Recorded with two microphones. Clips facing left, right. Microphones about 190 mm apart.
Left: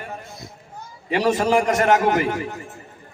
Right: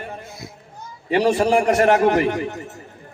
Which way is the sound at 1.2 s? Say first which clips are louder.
Right 1 dB; 35° right (ahead or behind).